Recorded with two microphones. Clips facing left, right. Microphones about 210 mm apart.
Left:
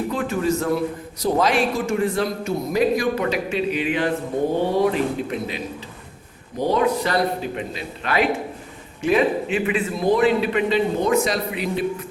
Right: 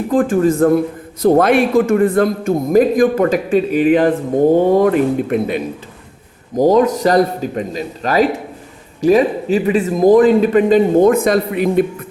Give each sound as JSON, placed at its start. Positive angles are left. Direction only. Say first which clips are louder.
{"t": 0.1, "sound": "a man's voice", "louder": "right 14 dB", "side_deg": -50}
{"t": 6.6, "sound": "a man's voice", "louder": "right 8 dB", "side_deg": -45}